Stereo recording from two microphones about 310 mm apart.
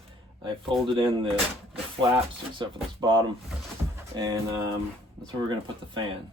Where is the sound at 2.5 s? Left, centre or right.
Centre.